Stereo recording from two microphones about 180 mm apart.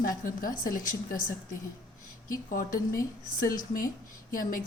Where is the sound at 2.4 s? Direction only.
50° left (ahead or behind).